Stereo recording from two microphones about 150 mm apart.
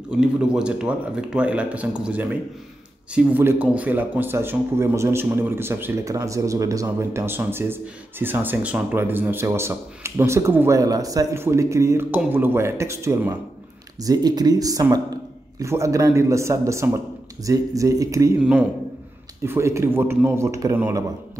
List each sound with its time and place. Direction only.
0.1 s a man's voice: 5° right (ahead or behind); by 18.3 s 20° right (ahead or behind)
18.4 s speech: 5° right (ahead or behind)